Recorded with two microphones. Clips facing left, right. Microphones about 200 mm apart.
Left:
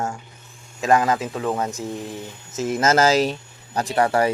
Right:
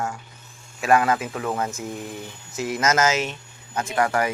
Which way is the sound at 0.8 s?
20° left (ahead or behind).